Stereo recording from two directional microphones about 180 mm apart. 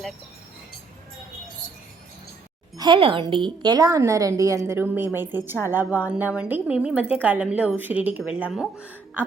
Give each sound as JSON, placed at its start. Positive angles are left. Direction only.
{"t": 2.7, "sound": "a woman's voice", "side_deg": -25}